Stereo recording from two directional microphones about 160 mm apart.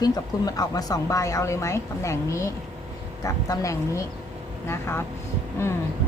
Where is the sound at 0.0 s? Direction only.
25° left (ahead or behind).